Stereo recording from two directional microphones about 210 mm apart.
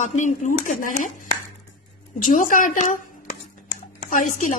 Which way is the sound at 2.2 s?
40° left (ahead or behind).